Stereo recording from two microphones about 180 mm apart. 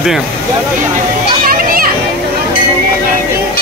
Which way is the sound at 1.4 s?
55° right (ahead or behind).